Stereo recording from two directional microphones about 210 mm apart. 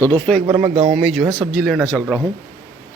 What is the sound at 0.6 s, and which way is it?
Speech, 25° right (ahead or behind).